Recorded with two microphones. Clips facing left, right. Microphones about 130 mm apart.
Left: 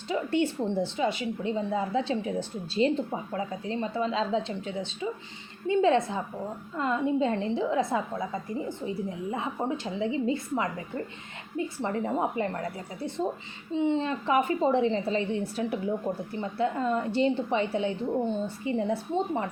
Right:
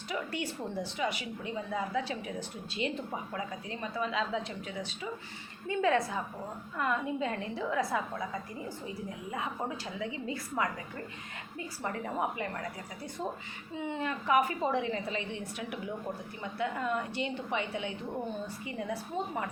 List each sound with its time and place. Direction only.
0.1 s a woman's voice: 30° left (ahead or behind)